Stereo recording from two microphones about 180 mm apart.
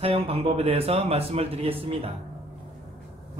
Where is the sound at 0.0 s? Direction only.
30° right (ahead or behind).